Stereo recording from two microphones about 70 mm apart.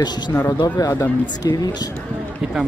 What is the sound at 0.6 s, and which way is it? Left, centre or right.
Speech, left.